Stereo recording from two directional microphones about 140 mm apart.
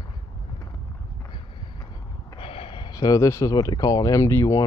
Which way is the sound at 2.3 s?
40° left (ahead or behind).